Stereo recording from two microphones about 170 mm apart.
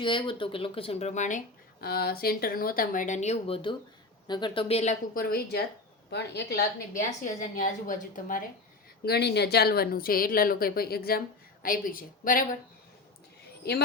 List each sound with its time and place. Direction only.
0.0 s speech: 30° left (ahead or behind); by 1.4 s 45° left (ahead or behind)
1.8 s a woman's voice: 65° left (ahead or behind); by 4.9 s 40° left (ahead or behind)
5.1 s a woman's voice: 60° left (ahead or behind)
6.1 s speech: 80° left
6.9 s a woman's voice: 50° left (ahead or behind)
9.0 s a woman's voice: 75° left (ahead or behind); by 12.5 s 55° left (ahead or behind)